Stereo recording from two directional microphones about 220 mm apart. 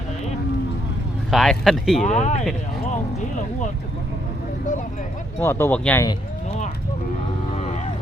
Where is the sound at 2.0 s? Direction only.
30° left (ahead or behind).